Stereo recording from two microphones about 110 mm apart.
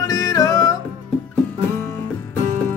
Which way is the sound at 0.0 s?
35° left (ahead or behind).